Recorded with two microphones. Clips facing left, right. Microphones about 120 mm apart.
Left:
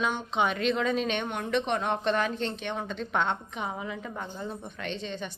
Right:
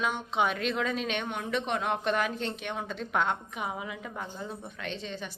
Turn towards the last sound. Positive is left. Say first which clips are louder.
# left 2 dB
turn(degrees=-5)  # may be behind; listen again after turning